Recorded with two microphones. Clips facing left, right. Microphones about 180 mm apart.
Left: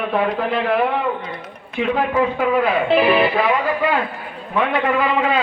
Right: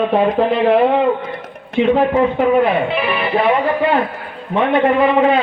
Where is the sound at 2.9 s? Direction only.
30° left (ahead or behind).